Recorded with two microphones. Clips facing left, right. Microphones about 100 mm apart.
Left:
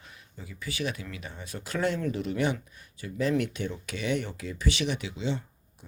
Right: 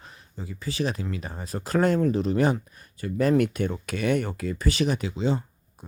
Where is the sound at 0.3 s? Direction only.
35° right (ahead or behind).